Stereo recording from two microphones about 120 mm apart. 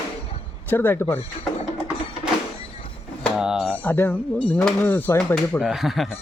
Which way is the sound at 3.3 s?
5° right (ahead or behind).